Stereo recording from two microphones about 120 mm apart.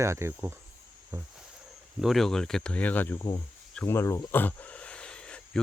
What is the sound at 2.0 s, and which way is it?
Speech, centre (ahead or behind).